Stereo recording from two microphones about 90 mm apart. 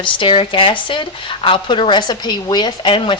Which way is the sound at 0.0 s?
75° left (ahead or behind).